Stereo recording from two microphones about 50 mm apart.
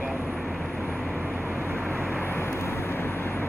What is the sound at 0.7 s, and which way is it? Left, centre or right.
Vehicle, right.